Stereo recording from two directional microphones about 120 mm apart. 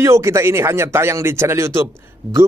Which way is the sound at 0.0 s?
25° right (ahead or behind).